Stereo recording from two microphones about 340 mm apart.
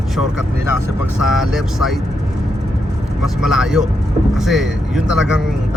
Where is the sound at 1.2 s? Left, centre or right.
Centre.